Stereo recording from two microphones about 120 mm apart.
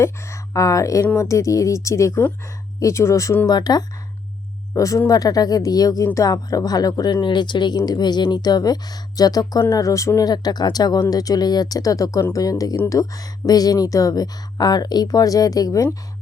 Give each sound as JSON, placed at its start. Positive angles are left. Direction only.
{"t": 0.0, "sound": "speech", "side_deg": 25}